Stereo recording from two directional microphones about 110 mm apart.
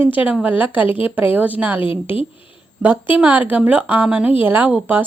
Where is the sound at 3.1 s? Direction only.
15° right (ahead or behind).